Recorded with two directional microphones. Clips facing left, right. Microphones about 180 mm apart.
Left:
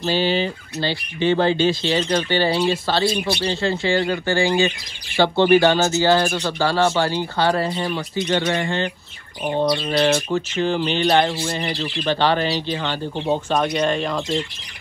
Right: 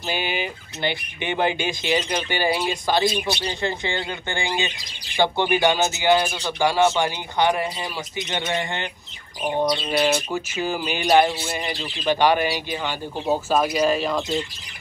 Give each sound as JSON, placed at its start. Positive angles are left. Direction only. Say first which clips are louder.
{"t": 0.0, "sound": "speech", "louder": "left 7 dB", "side_deg": -15}
{"t": 9.8, "sound": "speech", "louder": "left 3 dB", "side_deg": -10}